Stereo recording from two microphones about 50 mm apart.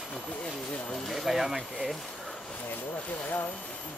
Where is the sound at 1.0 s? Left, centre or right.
Centre.